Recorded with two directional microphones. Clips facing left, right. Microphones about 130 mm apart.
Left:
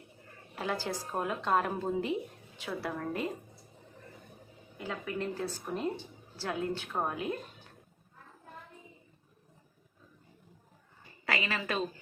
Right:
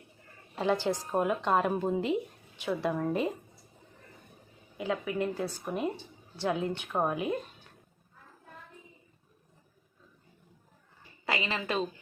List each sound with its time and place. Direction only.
0.6 s a woman's voice: 20° right (ahead or behind)
4.8 s a woman's voice: 15° right (ahead or behind)
11.3 s a woman's voice: 20° right (ahead or behind)